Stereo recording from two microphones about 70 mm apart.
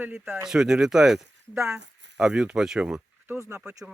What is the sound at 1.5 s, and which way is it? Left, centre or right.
Speech, right.